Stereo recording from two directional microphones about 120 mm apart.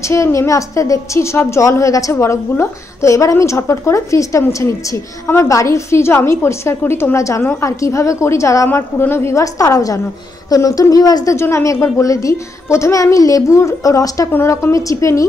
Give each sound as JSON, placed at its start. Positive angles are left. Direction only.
{"t": 0.0, "sound": "a woman's voice", "side_deg": 25}